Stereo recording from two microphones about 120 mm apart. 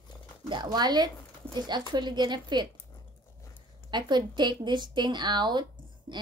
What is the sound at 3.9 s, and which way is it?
Speech, 40° right (ahead or behind).